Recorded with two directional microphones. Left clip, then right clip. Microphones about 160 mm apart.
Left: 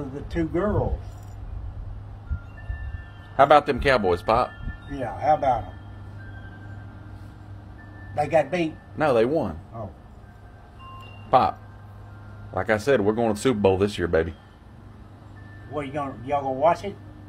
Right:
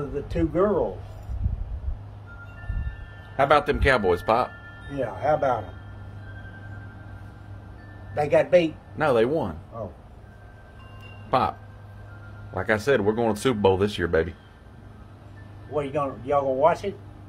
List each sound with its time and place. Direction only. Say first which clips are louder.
0.3 s a man's voice: right 3 dB; 25° right (ahead or behind)
3.3 s speech: left 3 dB; centre (ahead or behind)
4.9 s a man's voice: left 2 dB; 25° right (ahead or behind)
8.1 s speech: even; 25° right (ahead or behind)
8.9 s speech: left 1 dB; 5° right (ahead or behind)
11.2 s speech: left 4 dB; centre (ahead or behind)
12.5 s speech: left 1 dB; centre (ahead or behind)
15.7 s a man's voice: right 3 dB; 20° right (ahead or behind)